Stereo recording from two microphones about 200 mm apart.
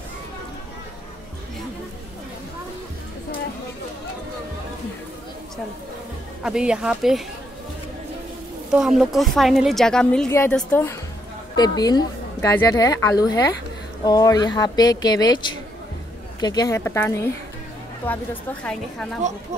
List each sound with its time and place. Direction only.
6.4 s a woman's voice: 5° right (ahead or behind)
8.7 s a woman's voice: 5° right (ahead or behind)
11.5 s a woman's voice: 20° left (ahead or behind)